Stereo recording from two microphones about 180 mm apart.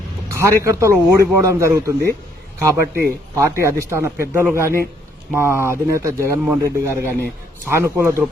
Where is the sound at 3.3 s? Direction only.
15° right (ahead or behind).